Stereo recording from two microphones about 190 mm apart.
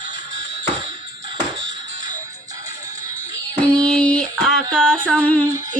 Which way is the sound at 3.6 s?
5° left (ahead or behind).